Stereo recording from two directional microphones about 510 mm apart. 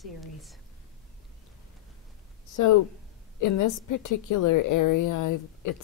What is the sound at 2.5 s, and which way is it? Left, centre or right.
A woman's voice, left.